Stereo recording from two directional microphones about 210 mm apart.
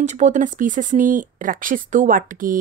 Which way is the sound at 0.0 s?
35° right (ahead or behind).